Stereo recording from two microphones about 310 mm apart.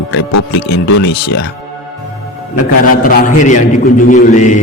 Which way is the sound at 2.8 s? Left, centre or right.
Left.